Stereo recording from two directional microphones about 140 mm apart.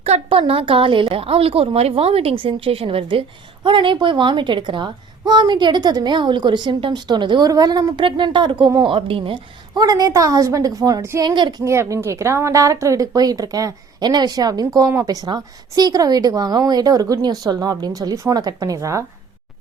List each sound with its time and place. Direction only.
0.0 s speech: 45° right (ahead or behind)
9.8 s a woman's voice: 25° right (ahead or behind)
11.6 s a woman's voice: 20° right (ahead or behind)